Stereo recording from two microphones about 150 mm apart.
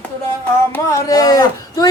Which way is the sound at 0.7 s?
25° left (ahead or behind).